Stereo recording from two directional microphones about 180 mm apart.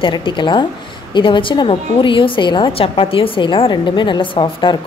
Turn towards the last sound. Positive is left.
turn(degrees=25)  # may be behind; listen again after turning